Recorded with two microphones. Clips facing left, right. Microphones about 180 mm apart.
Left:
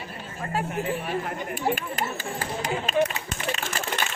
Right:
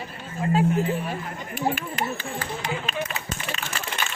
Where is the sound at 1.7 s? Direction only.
45° left (ahead or behind).